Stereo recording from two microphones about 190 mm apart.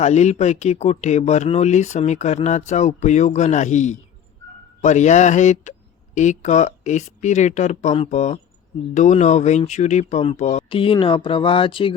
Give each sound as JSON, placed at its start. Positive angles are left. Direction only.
{"t": 0.0, "sound": "speech", "side_deg": 35}